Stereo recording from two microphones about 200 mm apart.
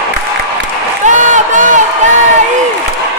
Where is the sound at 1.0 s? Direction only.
40° right (ahead or behind).